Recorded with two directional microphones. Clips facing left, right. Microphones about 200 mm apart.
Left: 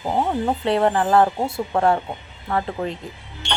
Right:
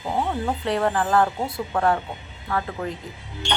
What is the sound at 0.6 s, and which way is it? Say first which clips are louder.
Speech: left 4 dB; 25° left (ahead or behind).